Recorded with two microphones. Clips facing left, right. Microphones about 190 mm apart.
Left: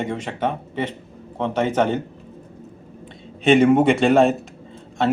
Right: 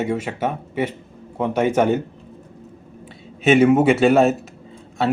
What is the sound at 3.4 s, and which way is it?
Speech, 5° right (ahead or behind).